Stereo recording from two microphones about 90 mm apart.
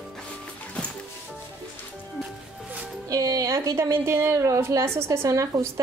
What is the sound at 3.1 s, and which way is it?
A woman's voice, 40° right (ahead or behind).